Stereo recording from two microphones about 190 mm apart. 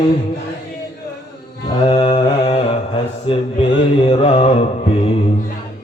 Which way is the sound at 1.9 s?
30° left (ahead or behind).